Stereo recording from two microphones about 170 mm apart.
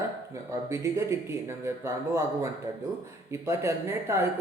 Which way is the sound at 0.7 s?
15° right (ahead or behind).